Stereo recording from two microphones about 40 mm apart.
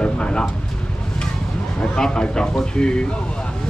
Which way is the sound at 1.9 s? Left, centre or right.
Left.